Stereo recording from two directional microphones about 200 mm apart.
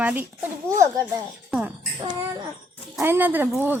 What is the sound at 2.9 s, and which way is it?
Speech, 10° right (ahead or behind).